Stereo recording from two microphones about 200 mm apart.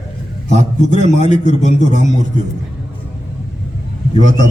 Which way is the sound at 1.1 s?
35° left (ahead or behind).